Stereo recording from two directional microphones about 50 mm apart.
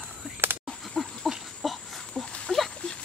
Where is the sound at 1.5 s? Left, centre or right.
Centre.